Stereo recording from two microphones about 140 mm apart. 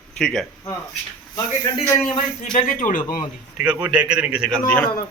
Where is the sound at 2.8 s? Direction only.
70° left (ahead or behind).